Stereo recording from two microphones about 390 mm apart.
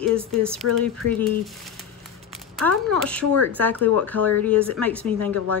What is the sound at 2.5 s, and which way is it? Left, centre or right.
Speech, centre.